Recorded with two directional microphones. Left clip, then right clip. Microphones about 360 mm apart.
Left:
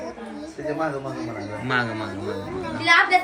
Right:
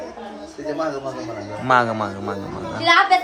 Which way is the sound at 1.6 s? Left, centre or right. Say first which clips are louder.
Right 8 dB; centre.